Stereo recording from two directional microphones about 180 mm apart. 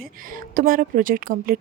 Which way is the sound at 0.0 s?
50° right (ahead or behind).